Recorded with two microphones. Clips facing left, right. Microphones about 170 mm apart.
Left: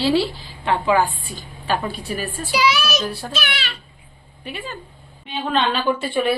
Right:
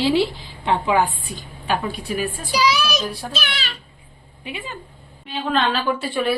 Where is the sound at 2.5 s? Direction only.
35° right (ahead or behind).